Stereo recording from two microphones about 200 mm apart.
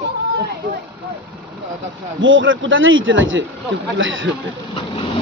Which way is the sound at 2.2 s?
75° right (ahead or behind).